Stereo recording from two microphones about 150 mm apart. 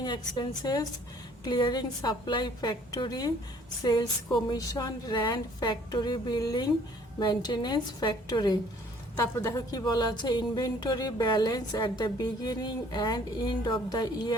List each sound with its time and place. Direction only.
0.0 s speech: 30° left (ahead or behind)